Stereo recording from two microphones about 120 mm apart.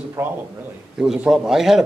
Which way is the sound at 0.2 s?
20° right (ahead or behind).